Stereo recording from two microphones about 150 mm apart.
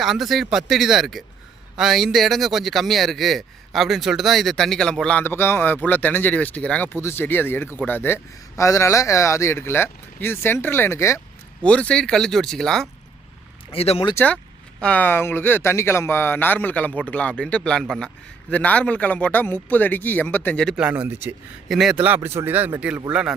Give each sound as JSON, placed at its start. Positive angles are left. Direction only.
{"t": 0.0, "sound": "a man's voice", "side_deg": 0}
{"t": 11.6, "sound": "speech", "side_deg": 5}
{"t": 13.7, "sound": "speech", "side_deg": 40}
{"t": 14.8, "sound": "a man's voice", "side_deg": 10}
{"t": 20.7, "sound": "speech", "side_deg": -5}
{"t": 21.7, "sound": "speech", "side_deg": -5}